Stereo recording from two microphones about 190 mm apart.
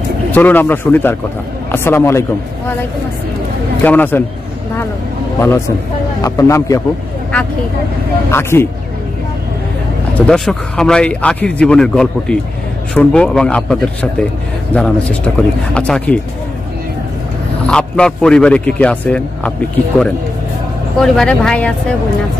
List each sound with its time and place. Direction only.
0.3 s speech: 10° left (ahead or behind)
3.8 s speech: 10° left (ahead or behind)
6.2 s speech: 15° left (ahead or behind)
8.3 s speech: 15° left (ahead or behind)
10.1 s speech: 5° left (ahead or behind)
17.6 s speech: 5° left (ahead or behind)
21.0 s speech: 5° left (ahead or behind)